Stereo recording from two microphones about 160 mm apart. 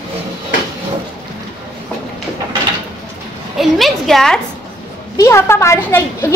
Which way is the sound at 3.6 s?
Centre (ahead or behind).